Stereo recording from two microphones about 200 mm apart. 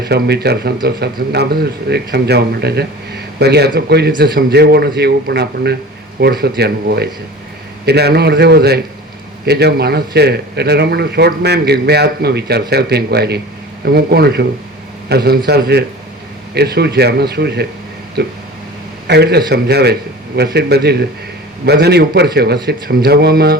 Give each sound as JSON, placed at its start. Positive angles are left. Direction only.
{"t": 0.1, "sound": "a man's voice", "side_deg": -55}